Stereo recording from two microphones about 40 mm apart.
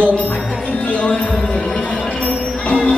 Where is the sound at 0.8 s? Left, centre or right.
Left.